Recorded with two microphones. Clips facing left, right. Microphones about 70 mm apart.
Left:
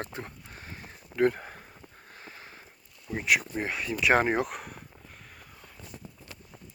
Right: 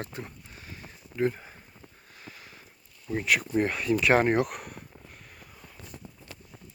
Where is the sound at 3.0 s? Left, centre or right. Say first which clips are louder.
Even; centre.